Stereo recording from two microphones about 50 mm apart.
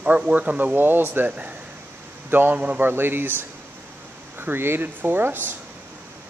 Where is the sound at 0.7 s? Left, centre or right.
Right.